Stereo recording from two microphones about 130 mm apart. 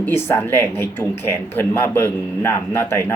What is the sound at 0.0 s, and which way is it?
Speech, 20° left (ahead or behind).